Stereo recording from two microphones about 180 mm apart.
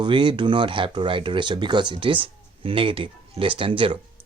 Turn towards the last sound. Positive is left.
turn(degrees=-30)  # may be behind; listen again after turning